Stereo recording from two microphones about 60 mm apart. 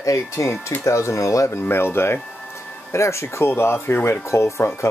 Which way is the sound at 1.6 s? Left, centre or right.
Left.